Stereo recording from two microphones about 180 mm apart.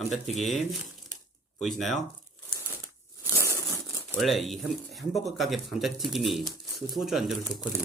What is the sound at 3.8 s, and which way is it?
Speech, centre (ahead or behind).